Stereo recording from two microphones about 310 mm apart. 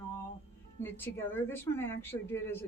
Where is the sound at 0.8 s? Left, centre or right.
Centre.